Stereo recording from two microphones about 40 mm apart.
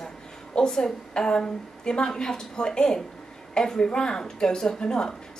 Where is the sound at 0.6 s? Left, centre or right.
Centre.